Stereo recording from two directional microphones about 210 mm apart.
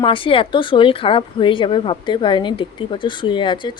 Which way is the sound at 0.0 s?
25° left (ahead or behind).